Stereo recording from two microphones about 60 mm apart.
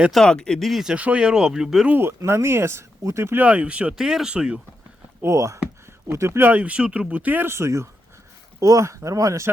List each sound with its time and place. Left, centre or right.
0.3 s speech: centre
0.7 s speech: centre
0.9 s speech: right
2.0 s speech: right
3.3 s speech: right
3.9 s speech: centre
5.2 s speech: right
6.1 s speech: right
6.5 s speech: right
7.1 s speech: right
7.4 s speech: right